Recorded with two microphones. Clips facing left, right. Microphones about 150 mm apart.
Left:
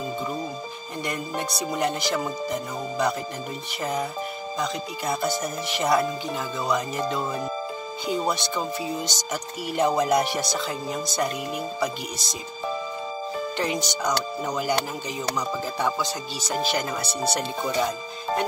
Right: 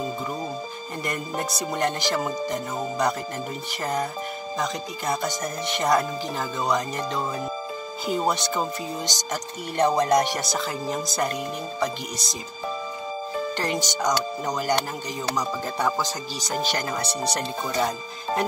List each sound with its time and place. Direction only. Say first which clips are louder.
1.0 s speech: even; centre (ahead or behind)
13.6 s speech: left 2 dB; centre (ahead or behind)
16.3 s speech: left 1 dB; centre (ahead or behind)